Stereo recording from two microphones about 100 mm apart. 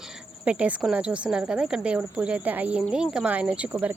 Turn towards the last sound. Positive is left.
turn(degrees=-10)  # may be behind; listen again after turning